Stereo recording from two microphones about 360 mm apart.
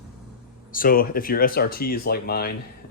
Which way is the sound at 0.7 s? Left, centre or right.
Left.